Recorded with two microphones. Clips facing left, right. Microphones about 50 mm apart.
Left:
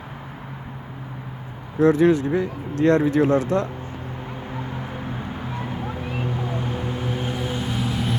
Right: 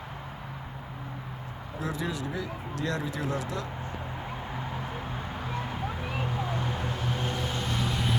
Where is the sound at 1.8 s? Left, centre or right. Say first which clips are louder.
Left 17 dB; left.